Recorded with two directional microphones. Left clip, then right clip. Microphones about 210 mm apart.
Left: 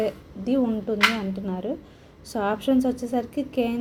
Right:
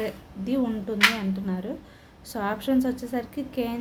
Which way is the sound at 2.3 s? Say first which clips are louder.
Left 3 dB; 5° left (ahead or behind).